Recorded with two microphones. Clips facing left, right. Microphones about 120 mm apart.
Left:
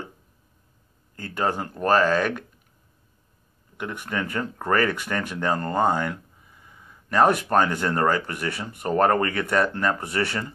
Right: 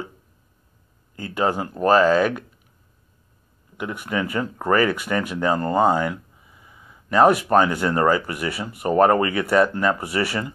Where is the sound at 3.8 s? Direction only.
10° right (ahead or behind).